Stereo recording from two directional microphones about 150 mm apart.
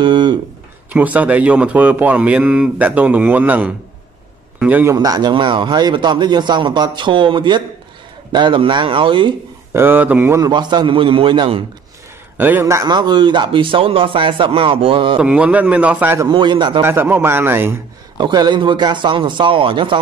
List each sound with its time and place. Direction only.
0.0 s a sound: 30° right (ahead or behind)
0.9 s speech: 10° right (ahead or behind)
4.9 s speech: 25° right (ahead or behind)
9.8 s speech: 15° right (ahead or behind)
10.4 s speech: 30° right (ahead or behind)
12.4 s speech: 15° right (ahead or behind); by 15.1 s 35° right (ahead or behind)
15.1 s speech: 10° right (ahead or behind)
16.3 s speech: 30° right (ahead or behind)
16.8 s speech: 15° right (ahead or behind)
18.1 s speech: 25° right (ahead or behind)